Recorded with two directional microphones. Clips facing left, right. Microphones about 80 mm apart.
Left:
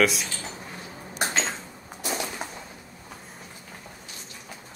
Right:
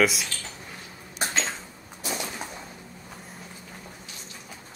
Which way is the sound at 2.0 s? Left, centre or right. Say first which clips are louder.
Left 2 dB; left.